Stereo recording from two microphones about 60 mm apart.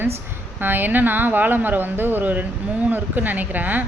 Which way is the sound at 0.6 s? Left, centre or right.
Right.